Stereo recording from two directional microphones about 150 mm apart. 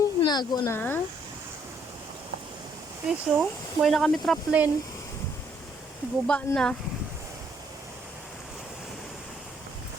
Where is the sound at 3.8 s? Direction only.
Centre (ahead or behind).